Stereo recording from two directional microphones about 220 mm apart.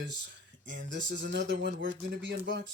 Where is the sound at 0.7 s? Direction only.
55° right (ahead or behind).